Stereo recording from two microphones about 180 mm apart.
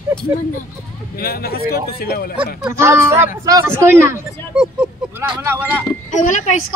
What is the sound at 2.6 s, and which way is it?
Speech, 15° right (ahead or behind).